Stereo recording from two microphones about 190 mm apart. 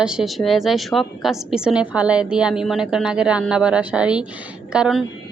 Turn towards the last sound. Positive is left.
turn(degrees=-5)  # may be behind; listen again after turning